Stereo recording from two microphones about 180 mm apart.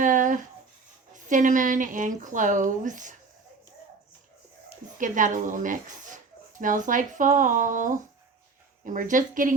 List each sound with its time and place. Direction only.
0.0 s a sound: 45° right (ahead or behind)
1.1 s speech: 45° right (ahead or behind)
4.9 s speech: 45° right (ahead or behind)